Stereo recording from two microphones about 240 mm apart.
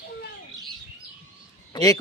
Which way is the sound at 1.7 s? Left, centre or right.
Centre.